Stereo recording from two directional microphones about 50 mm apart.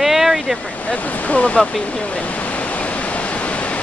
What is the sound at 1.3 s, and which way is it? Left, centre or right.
Speech, left.